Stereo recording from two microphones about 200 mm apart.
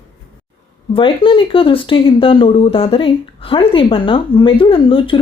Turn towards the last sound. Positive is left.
turn(degrees=25)  # may be behind; listen again after turning